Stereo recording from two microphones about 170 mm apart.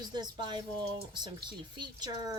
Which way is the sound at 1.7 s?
25° right (ahead or behind).